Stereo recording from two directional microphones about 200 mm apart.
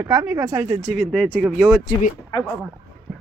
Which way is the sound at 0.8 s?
Centre (ahead or behind).